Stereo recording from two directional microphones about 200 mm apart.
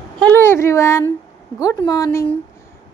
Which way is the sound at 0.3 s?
10° left (ahead or behind).